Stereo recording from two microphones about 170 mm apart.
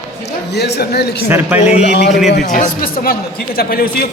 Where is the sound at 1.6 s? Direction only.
45° left (ahead or behind).